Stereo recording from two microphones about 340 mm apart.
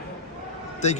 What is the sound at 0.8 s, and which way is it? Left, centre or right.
Speech, centre.